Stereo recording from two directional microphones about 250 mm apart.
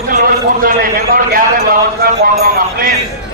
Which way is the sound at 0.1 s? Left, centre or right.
Right.